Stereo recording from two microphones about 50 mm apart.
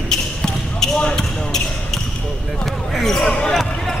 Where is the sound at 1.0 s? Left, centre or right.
Centre.